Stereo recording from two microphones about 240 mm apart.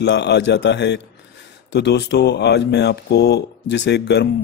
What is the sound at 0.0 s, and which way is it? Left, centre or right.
Speech, left.